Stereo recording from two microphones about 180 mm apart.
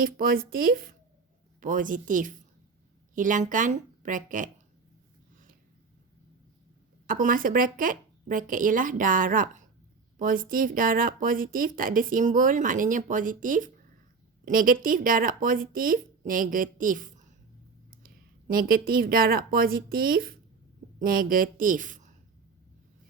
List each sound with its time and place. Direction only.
0.0 s a woman's voice: 55° right (ahead or behind)
7.1 s a woman's voice: 50° right (ahead or behind)